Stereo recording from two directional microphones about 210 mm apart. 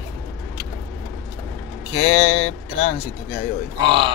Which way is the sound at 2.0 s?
30° left (ahead or behind).